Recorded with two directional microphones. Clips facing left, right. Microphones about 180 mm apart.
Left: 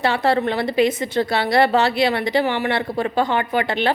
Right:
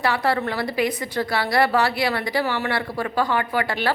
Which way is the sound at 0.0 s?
25° left (ahead or behind).